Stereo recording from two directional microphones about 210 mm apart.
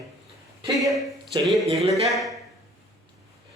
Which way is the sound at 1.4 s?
Centre (ahead or behind).